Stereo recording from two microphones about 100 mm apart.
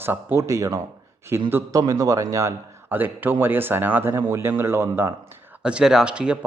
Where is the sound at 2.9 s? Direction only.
20° right (ahead or behind).